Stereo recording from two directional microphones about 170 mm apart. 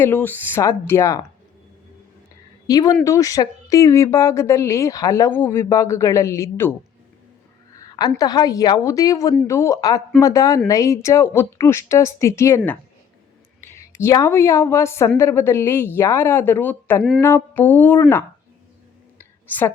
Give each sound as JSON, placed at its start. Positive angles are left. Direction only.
{"t": 0.0, "sound": "speech", "side_deg": 10}
{"t": 2.6, "sound": "speech", "side_deg": 20}
{"t": 7.8, "sound": "a sound", "side_deg": 25}
{"t": 8.2, "sound": "a woman's voice", "side_deg": 20}
{"t": 19.5, "sound": "speech", "side_deg": 10}